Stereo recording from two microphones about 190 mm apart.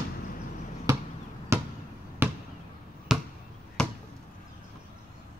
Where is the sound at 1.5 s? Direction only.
15° right (ahead or behind).